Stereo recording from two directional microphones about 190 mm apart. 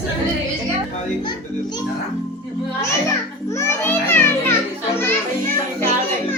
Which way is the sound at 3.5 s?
15° left (ahead or behind).